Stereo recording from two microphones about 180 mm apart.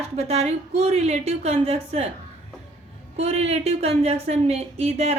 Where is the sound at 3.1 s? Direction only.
35° right (ahead or behind).